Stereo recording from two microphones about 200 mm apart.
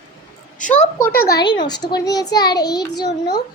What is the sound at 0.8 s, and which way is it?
Speech, 40° left (ahead or behind).